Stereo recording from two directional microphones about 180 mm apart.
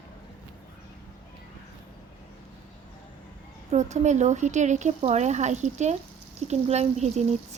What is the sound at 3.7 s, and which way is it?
A woman's voice, 40° right (ahead or behind).